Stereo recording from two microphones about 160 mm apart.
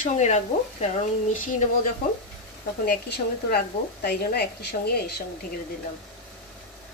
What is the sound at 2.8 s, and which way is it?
Speech, 70° left (ahead or behind).